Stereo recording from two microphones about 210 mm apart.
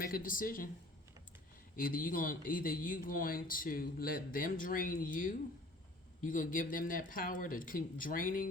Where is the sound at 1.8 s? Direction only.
40° left (ahead or behind).